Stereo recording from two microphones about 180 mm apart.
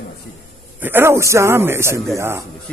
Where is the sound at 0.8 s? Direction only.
10° right (ahead or behind).